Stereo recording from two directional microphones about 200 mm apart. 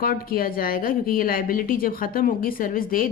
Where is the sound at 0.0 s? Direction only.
45° left (ahead or behind).